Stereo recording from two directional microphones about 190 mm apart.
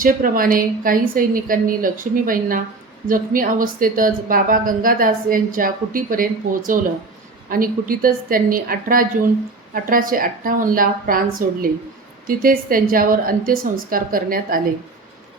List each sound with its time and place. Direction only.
0.0 s a woman's voice: 45° right (ahead or behind)